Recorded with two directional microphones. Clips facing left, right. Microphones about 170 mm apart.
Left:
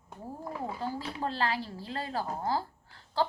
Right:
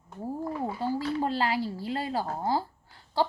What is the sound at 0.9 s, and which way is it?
A woman's voice, 10° right (ahead or behind).